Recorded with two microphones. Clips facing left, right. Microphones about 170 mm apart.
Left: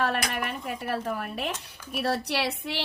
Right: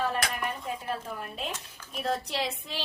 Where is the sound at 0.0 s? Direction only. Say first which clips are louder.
Left 2 dB; 75° left (ahead or behind).